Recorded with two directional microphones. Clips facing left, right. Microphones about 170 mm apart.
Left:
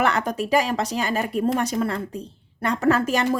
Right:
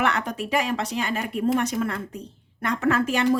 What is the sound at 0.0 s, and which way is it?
A woman's voice, 40° left (ahead or behind).